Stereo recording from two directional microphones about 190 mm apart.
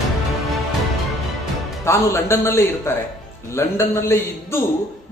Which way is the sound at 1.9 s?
15° left (ahead or behind).